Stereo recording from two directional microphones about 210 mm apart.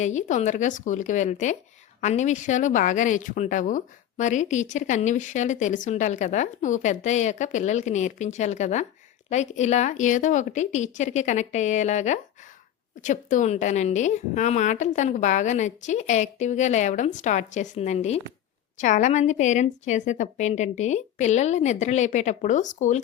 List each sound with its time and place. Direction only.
0.0 s speech: 35° left (ahead or behind)